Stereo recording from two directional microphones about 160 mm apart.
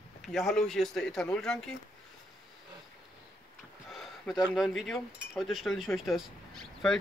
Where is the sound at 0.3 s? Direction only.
Centre (ahead or behind).